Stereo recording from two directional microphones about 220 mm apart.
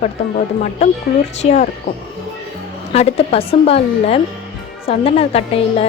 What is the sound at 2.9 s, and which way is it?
A woman's voice, 30° left (ahead or behind).